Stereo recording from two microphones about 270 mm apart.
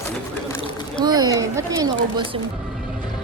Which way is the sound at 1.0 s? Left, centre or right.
Centre.